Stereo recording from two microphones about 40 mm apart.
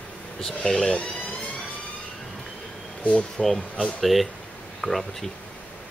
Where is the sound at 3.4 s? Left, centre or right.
Centre.